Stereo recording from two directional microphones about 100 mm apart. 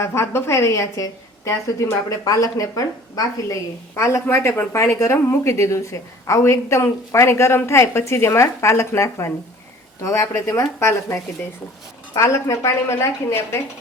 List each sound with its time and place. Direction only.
0.0 s a woman's voice: 30° left (ahead or behind)